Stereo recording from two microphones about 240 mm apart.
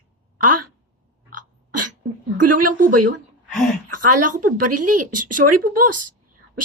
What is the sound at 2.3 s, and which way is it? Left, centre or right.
Speech, right.